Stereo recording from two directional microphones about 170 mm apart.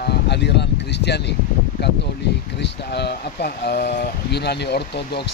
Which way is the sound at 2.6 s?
75° left (ahead or behind).